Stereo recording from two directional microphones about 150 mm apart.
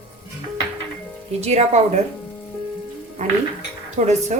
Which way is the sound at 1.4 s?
45° right (ahead or behind).